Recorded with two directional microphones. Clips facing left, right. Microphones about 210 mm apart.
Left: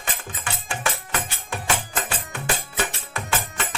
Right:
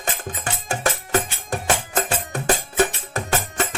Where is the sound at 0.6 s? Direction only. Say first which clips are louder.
Right 5 dB; 40° right (ahead or behind).